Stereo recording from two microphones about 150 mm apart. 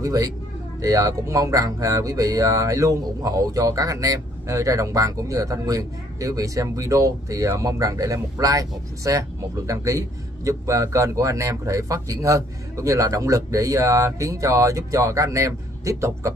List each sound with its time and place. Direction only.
0.0 s speech: 20° right (ahead or behind)